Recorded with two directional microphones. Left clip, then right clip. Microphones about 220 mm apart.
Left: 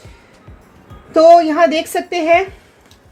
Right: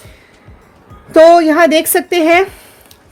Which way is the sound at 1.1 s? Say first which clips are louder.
Right 2 dB; 40° right (ahead or behind).